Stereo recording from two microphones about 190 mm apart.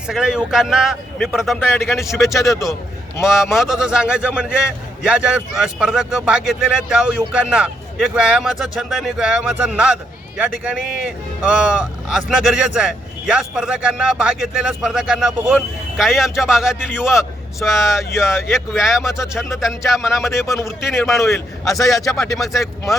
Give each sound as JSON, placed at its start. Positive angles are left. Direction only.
{"t": 0.1, "sound": "speech", "side_deg": -5}
{"t": 1.5, "sound": "a man's voice", "side_deg": 10}
{"t": 1.9, "sound": "speech", "side_deg": 0}
{"t": 20.2, "sound": "a man's voice", "side_deg": 15}
{"t": 21.7, "sound": "speech", "side_deg": 0}